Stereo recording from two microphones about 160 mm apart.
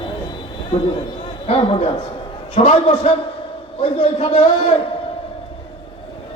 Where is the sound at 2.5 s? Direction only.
45° left (ahead or behind).